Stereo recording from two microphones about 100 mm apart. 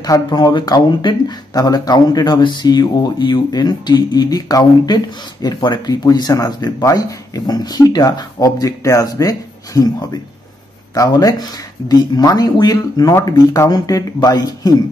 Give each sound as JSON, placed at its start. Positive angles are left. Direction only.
{"t": 0.0, "sound": "speech", "side_deg": 40}